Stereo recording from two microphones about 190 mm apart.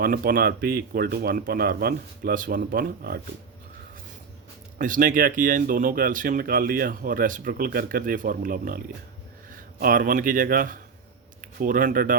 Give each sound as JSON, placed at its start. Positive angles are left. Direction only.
{"t": 0.0, "sound": "speech", "side_deg": -50}
{"t": 4.8, "sound": "speech", "side_deg": -45}
{"t": 9.8, "sound": "speech", "side_deg": -45}